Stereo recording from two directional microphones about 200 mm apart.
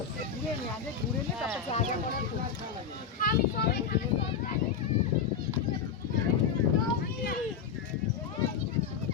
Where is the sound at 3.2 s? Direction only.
45° left (ahead or behind).